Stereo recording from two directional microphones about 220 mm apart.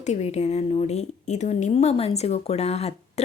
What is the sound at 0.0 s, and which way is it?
A woman's voice, 30° left (ahead or behind).